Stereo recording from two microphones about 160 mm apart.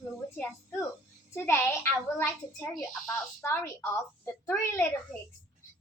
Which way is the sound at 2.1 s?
15° left (ahead or behind).